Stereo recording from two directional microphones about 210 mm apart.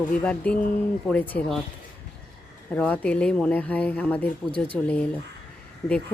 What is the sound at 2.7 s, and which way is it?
Speech, 5° left (ahead or behind).